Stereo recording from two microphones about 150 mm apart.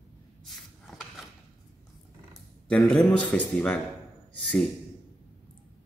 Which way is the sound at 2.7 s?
5° left (ahead or behind).